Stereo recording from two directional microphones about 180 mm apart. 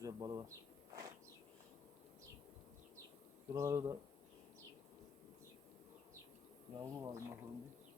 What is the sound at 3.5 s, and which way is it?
Speech, 15° right (ahead or behind).